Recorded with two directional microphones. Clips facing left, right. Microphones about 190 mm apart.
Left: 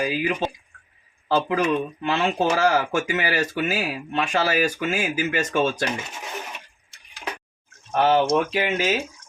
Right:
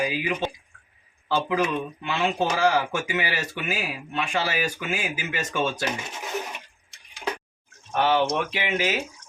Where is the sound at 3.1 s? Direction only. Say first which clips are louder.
Left 4 dB; 45° left (ahead or behind).